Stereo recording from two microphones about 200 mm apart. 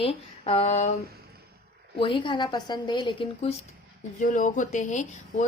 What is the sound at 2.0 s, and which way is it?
A woman's voice, 25° left (ahead or behind).